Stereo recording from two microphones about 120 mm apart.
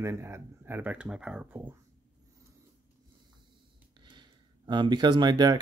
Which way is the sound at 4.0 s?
40° right (ahead or behind).